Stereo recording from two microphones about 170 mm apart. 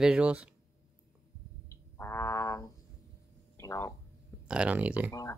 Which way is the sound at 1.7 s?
15° left (ahead or behind).